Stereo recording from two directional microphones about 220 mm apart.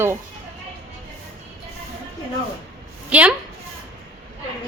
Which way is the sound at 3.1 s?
5° right (ahead or behind).